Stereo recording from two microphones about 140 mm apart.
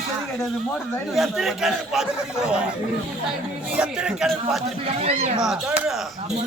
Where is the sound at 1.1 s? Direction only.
Centre (ahead or behind).